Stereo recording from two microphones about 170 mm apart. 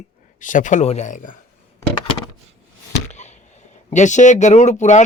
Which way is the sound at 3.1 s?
45° left (ahead or behind).